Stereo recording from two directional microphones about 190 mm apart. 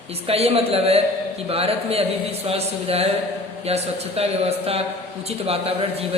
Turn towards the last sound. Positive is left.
turn(degrees=-30)  # may be behind; listen again after turning